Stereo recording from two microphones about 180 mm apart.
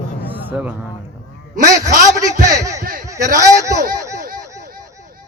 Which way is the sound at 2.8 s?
50° right (ahead or behind).